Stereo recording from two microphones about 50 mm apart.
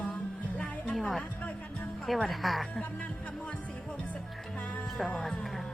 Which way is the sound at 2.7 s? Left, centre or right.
Left.